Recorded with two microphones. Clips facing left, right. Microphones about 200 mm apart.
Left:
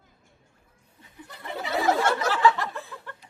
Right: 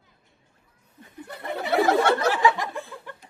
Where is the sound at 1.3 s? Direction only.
60° right (ahead or behind).